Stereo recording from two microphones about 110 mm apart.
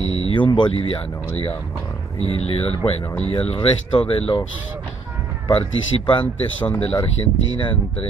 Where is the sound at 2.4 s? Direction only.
60° left (ahead or behind).